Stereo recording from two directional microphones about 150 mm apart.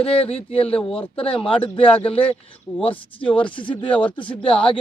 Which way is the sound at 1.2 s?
35° left (ahead or behind).